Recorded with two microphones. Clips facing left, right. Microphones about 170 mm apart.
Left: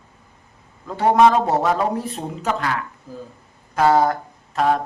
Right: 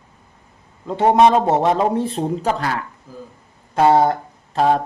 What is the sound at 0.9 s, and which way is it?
A man's voice, 25° right (ahead or behind).